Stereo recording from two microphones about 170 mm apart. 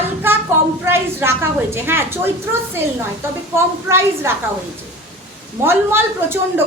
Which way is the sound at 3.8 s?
15° right (ahead or behind).